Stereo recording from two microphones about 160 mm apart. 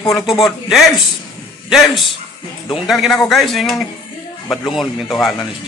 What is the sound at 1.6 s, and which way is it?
Speech, centre (ahead or behind).